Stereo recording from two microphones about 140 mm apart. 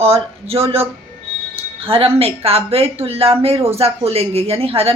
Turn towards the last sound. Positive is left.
turn(degrees=-45)  # may be behind; listen again after turning